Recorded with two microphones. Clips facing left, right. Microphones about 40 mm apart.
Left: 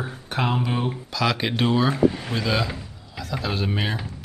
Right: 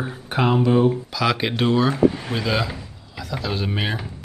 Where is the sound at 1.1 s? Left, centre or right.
Centre.